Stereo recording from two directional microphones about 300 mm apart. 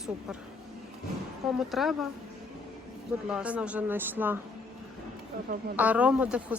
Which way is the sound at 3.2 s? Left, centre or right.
Centre.